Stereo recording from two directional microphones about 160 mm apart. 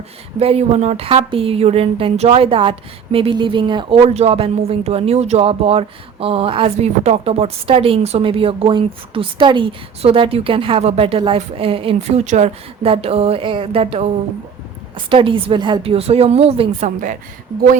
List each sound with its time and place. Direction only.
0.3 s speech: 40° right (ahead or behind)
15.1 s speech: 30° right (ahead or behind); by 17.2 s 50° right (ahead or behind)